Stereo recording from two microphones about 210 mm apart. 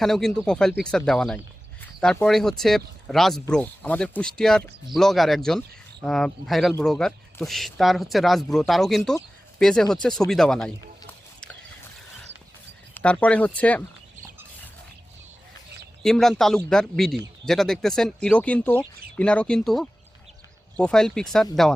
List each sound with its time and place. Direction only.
0.0 s a man's voice: centre (ahead or behind)
12.9 s speech: 5° left (ahead or behind)
16.0 s a man's voice: centre (ahead or behind)